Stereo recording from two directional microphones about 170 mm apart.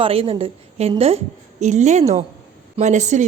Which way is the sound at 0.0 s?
35° right (ahead or behind).